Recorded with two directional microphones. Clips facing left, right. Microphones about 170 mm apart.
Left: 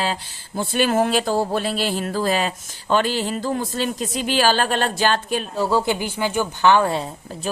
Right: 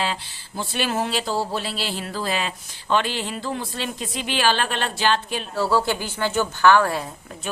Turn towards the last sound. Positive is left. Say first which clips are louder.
# left 4 dB
turn(degrees=30)  # may be behind; listen again after turning